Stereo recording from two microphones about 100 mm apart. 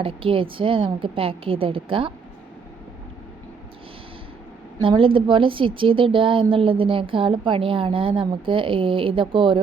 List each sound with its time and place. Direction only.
0.0 s a woman's voice: 65° right (ahead or behind)
4.8 s a woman's voice: 60° right (ahead or behind)